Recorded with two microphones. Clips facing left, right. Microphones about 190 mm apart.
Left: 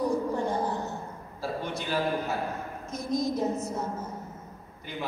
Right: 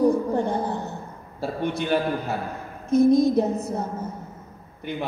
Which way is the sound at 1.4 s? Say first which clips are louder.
Right 6 dB; 60° right (ahead or behind).